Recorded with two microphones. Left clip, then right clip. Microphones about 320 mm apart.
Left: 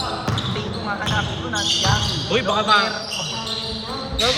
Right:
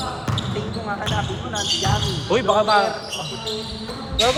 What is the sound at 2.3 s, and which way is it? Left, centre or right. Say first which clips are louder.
Speech: right 1 dB; centre.